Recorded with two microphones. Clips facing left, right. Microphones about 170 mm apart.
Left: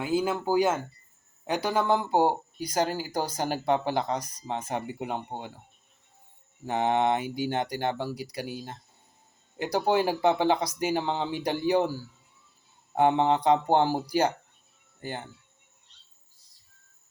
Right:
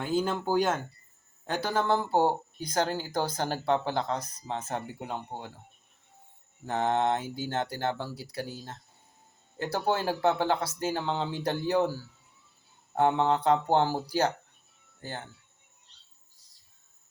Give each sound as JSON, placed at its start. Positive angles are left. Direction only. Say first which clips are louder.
{"t": 0.0, "sound": "speech", "louder": "left 2 dB", "side_deg": 10}
{"t": 6.7, "sound": "speech", "louder": "left 2 dB", "side_deg": 10}
{"t": 12.9, "sound": "speech", "louder": "left 2 dB", "side_deg": 15}